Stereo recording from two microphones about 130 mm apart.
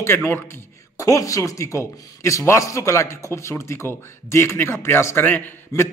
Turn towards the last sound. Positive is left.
turn(degrees=20)  # may be behind; listen again after turning